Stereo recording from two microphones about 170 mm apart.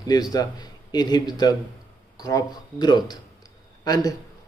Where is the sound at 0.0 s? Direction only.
25° left (ahead or behind).